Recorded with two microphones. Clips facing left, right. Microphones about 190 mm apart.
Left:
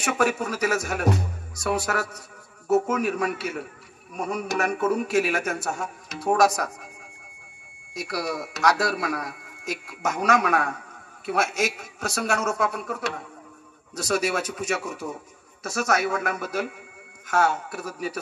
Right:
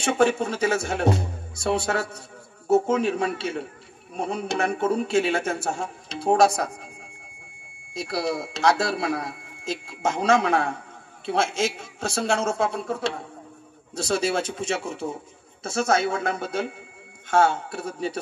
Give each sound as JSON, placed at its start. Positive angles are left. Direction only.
{"t": 0.0, "sound": "a man's voice", "side_deg": -30}